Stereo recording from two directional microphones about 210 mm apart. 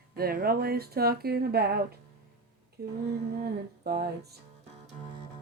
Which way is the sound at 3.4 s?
50° right (ahead or behind).